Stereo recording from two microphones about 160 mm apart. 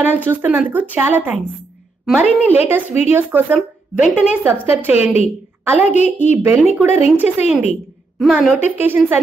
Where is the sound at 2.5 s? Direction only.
10° right (ahead or behind).